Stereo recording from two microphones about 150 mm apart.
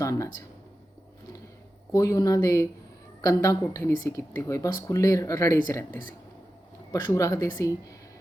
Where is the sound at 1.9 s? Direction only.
20° left (ahead or behind).